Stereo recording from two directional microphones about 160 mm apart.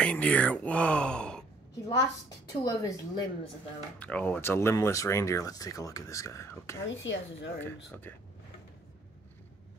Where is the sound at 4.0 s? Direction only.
10° left (ahead or behind).